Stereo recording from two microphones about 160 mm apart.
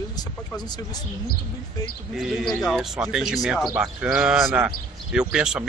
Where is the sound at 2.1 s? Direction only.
Centre (ahead or behind).